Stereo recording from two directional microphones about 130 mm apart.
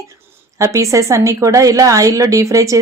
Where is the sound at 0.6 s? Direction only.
25° right (ahead or behind).